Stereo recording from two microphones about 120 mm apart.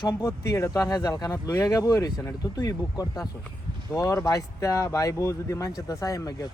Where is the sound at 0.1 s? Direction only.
30° left (ahead or behind).